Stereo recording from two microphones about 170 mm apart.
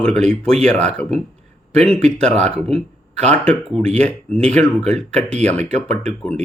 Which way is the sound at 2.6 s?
35° right (ahead or behind).